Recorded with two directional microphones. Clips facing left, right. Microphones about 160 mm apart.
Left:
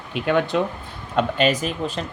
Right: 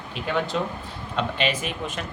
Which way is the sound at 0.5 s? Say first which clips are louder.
Left 5 dB; 65° left (ahead or behind).